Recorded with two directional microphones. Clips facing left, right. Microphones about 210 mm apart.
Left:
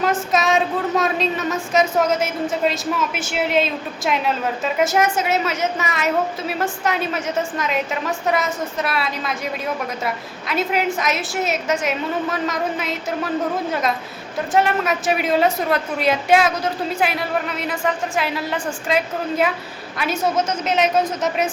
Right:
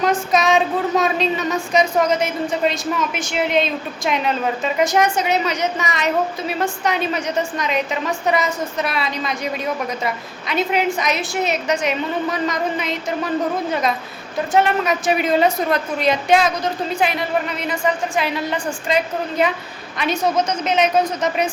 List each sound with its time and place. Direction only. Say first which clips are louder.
0.0 s a woman's voice: right 2 dB; centre (ahead or behind)